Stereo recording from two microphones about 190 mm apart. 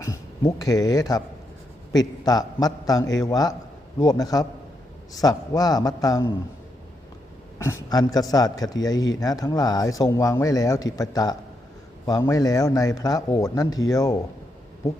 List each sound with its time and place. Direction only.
0.0 s speech: 15° left (ahead or behind)
7.6 s speech: 15° left (ahead or behind)